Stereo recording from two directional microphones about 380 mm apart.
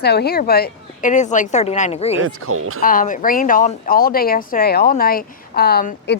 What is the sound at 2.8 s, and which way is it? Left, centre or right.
A woman's voice, left.